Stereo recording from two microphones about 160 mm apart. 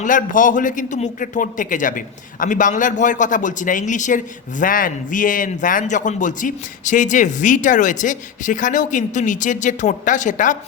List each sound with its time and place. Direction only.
0.0 s a man's voice: 55° left (ahead or behind)